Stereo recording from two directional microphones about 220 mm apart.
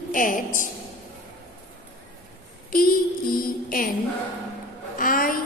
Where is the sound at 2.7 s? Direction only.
40° left (ahead or behind).